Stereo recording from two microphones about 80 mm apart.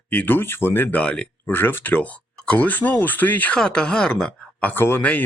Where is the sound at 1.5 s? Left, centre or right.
Left.